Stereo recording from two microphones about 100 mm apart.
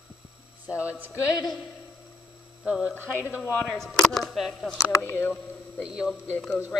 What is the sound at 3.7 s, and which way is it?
Speech, 5° left (ahead or behind).